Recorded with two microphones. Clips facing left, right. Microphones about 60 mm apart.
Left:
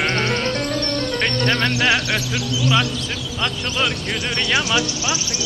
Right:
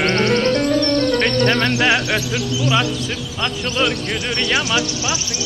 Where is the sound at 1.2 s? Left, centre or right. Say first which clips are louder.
Right 3 dB; centre.